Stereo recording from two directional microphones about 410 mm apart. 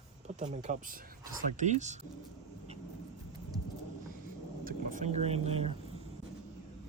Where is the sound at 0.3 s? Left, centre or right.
Centre.